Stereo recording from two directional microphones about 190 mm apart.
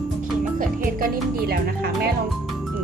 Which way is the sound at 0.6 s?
45° right (ahead or behind).